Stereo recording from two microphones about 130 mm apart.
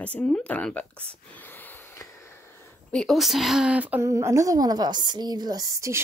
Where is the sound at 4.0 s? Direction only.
20° right (ahead or behind).